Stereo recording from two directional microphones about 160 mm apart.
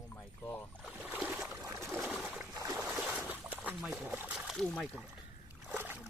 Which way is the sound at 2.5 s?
20° right (ahead or behind).